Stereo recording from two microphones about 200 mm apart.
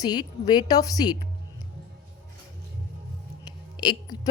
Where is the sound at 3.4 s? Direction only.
20° left (ahead or behind).